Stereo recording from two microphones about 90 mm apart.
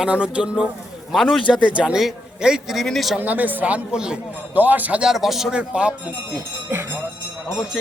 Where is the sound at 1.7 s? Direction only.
10° right (ahead or behind).